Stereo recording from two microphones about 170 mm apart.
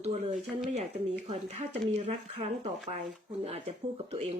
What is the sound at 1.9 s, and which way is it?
Speech, 40° right (ahead or behind).